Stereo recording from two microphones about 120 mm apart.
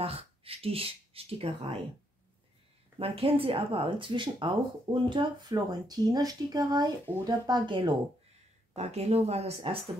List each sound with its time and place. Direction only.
0.0 s speech: 55° right (ahead or behind)
3.0 s speech: 50° right (ahead or behind)
8.7 s a woman's voice: 65° right (ahead or behind)